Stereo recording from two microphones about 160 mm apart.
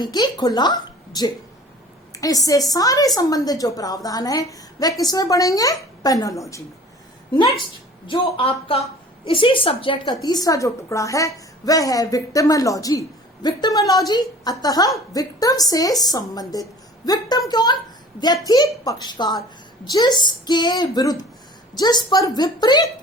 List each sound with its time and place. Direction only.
0.0 s a woman's voice: 25° left (ahead or behind)
8.0 s a woman's voice: 30° left (ahead or behind)